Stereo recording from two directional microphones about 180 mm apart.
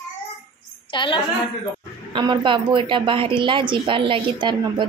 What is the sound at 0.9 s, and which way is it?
Speech, 25° left (ahead or behind).